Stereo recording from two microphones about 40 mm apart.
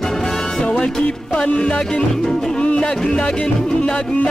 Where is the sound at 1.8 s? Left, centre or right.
Centre.